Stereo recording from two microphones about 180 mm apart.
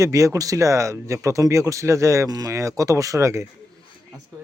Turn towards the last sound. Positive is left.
turn(degrees=-15)  # may be behind; listen again after turning